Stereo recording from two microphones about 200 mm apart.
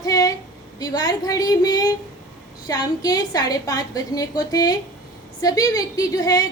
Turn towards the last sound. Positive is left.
turn(degrees=20)  # may be behind; listen again after turning